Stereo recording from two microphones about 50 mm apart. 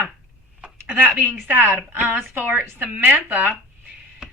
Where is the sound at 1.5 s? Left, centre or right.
Right.